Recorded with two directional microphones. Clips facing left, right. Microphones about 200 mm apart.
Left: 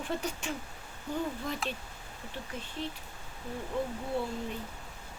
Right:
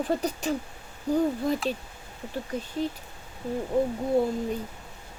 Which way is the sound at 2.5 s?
40° right (ahead or behind).